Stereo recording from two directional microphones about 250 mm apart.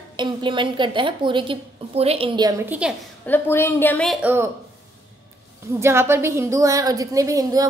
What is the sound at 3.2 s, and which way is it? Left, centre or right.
A woman's voice, centre.